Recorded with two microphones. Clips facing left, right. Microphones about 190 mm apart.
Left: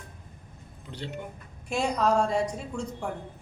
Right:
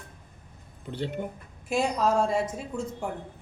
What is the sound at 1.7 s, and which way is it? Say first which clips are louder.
A man's voice: even; 5° right (ahead or behind).